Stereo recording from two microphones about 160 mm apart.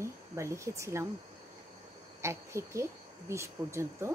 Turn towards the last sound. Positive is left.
turn(degrees=-15)  # may be behind; listen again after turning